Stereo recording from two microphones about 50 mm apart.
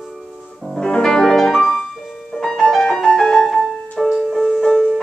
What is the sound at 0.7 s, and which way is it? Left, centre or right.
Music, centre.